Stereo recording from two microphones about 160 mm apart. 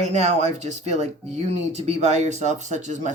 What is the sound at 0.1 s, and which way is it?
Speech, 45° right (ahead or behind).